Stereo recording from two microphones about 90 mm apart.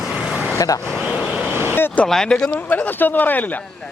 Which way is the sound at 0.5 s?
40° left (ahead or behind).